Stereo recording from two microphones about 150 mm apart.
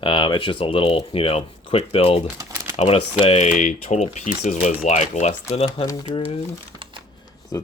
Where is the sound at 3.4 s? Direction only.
55° left (ahead or behind).